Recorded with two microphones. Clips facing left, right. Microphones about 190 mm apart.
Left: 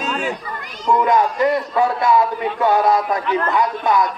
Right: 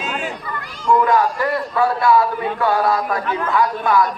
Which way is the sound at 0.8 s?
20° left (ahead or behind).